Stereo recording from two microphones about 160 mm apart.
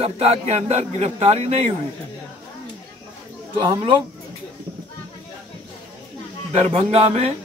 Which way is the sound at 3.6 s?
30° right (ahead or behind).